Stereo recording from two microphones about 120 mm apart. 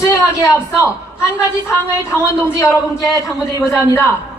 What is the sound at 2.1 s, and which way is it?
A man's voice, 25° left (ahead or behind).